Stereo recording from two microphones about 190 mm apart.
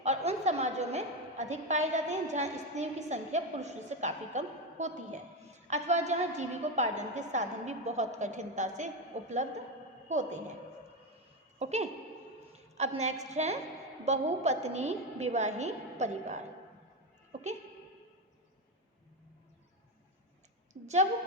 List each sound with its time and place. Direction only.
0.0 s a woman's voice: 35° right (ahead or behind)
11.6 s a woman's voice: 35° right (ahead or behind)
20.8 s a woman's voice: 35° right (ahead or behind)